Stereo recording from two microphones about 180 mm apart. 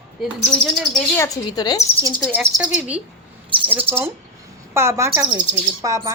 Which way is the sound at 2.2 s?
10° right (ahead or behind).